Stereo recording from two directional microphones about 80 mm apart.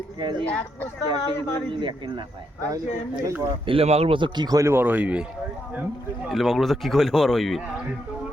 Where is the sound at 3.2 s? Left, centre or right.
Right.